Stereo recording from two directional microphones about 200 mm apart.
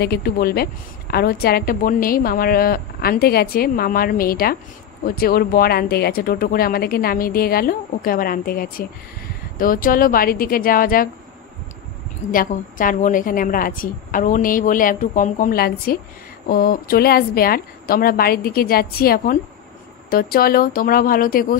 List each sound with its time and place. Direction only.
0.0 s a woman's voice: 50° left (ahead or behind)
12.3 s a woman's voice: 45° left (ahead or behind)